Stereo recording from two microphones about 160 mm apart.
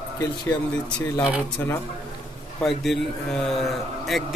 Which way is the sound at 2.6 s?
Centre (ahead or behind).